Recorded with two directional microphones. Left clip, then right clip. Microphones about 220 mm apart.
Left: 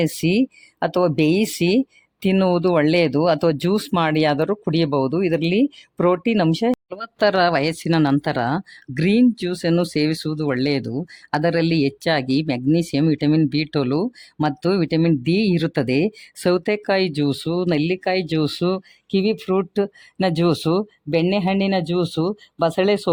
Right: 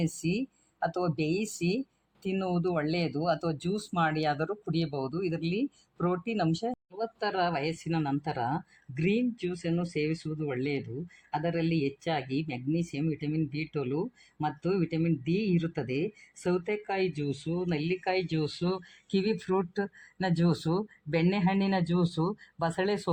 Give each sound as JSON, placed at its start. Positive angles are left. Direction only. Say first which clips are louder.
{"t": 0.0, "sound": "speech", "louder": "left 13 dB", "side_deg": 50}